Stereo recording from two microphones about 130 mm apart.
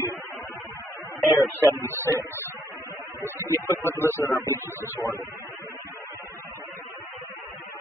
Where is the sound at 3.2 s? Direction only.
15° right (ahead or behind).